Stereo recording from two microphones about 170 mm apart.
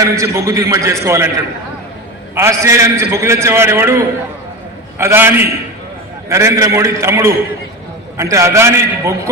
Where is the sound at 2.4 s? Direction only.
15° right (ahead or behind).